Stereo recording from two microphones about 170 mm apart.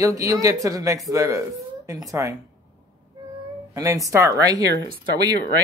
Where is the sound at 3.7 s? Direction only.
20° right (ahead or behind).